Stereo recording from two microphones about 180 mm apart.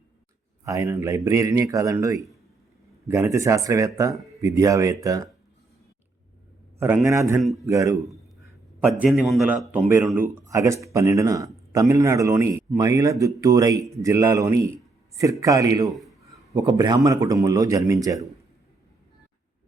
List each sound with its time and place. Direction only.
0.6 s speech: 15° right (ahead or behind)
6.7 s speech: 15° right (ahead or behind)
7.4 s a man's voice: centre (ahead or behind)
7.7 s speech: 20° right (ahead or behind)
9.0 s a man's voice: centre (ahead or behind); by 15.9 s 20° right (ahead or behind)
15.9 s a sound: centre (ahead or behind)
16.2 s a man's voice: 20° right (ahead or behind)